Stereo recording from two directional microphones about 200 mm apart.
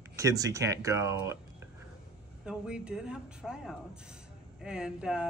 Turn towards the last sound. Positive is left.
turn(degrees=-5)  # may be behind; listen again after turning